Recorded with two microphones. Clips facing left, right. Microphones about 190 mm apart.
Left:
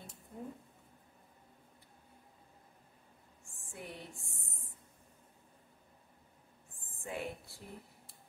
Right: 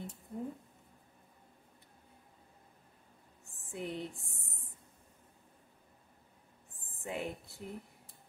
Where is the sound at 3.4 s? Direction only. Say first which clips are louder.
Right 7 dB; 20° right (ahead or behind).